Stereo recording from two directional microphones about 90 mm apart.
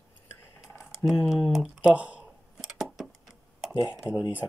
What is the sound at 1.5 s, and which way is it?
Speech, 5° right (ahead or behind).